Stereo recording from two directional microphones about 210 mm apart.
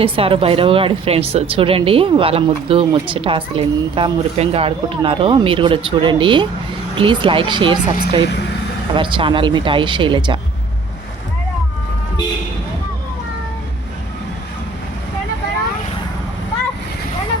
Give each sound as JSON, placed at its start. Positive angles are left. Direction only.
{"t": 0.0, "sound": "a woman's voice", "side_deg": -25}